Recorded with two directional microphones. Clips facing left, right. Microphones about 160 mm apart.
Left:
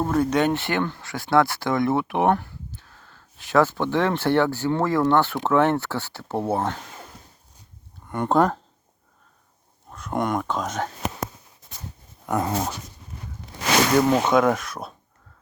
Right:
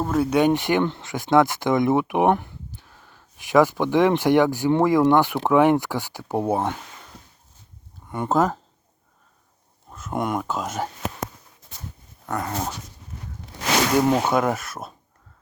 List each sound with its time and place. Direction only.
0.0 s speech: 5° right (ahead or behind)
8.1 s speech: 5° right (ahead or behind)
9.9 s speech: centre (ahead or behind)
12.3 s dog: 20° left (ahead or behind)
14.1 s speech: 10° right (ahead or behind)